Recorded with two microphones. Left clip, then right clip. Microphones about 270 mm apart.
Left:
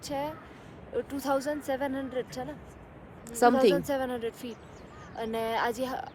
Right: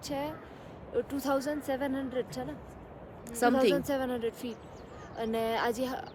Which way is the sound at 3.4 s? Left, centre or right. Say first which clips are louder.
Left 4 dB; centre.